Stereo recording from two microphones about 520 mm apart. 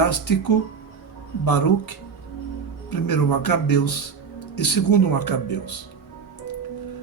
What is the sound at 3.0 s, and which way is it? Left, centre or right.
Speech, left.